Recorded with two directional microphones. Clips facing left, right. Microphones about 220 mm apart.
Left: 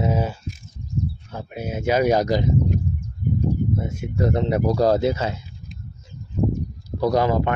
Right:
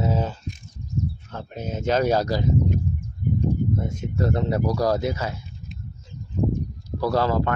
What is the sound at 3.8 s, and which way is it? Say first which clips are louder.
Speech: left 2 dB; 10° left (ahead or behind).